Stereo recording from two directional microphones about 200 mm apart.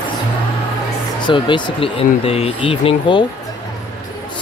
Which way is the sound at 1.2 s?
25° left (ahead or behind).